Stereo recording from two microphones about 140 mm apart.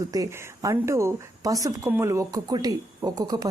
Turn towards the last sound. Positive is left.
turn(degrees=-25)  # may be behind; listen again after turning